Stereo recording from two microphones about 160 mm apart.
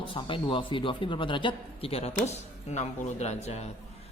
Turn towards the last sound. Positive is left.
turn(degrees=40)  # may be behind; listen again after turning